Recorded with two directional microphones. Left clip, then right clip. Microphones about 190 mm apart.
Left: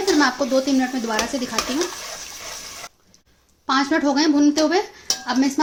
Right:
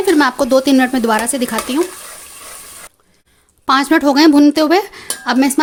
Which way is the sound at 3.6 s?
65° right (ahead or behind).